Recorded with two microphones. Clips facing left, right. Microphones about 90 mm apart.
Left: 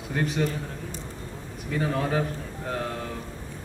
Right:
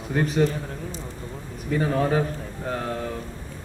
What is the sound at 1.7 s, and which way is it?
Speech, 35° right (ahead or behind).